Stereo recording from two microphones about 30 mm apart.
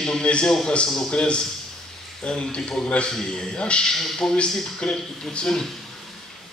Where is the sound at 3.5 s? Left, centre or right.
Left.